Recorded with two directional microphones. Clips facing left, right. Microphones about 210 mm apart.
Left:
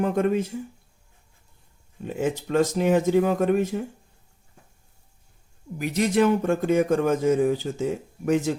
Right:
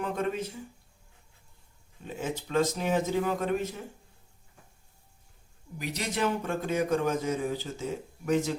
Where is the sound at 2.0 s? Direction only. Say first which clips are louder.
Left 8 dB; 55° left (ahead or behind).